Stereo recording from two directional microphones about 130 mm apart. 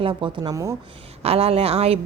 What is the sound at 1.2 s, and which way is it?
Speech, 50° right (ahead or behind).